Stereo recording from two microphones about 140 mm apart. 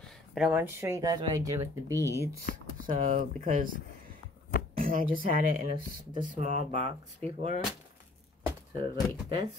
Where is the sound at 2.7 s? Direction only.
70° right (ahead or behind).